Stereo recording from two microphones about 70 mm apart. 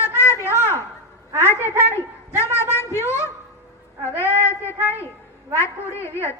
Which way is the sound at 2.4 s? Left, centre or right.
Left.